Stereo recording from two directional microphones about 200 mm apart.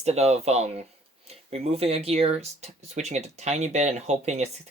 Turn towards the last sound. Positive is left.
turn(degrees=-35)  # may be behind; listen again after turning